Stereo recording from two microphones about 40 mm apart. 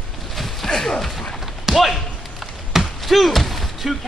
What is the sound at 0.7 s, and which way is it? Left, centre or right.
Dog, centre.